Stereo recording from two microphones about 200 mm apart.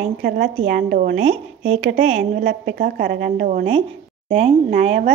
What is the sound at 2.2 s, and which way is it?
A woman's voice, 45° right (ahead or behind).